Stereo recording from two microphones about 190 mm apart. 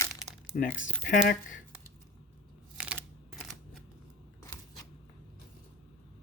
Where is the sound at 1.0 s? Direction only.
45° left (ahead or behind).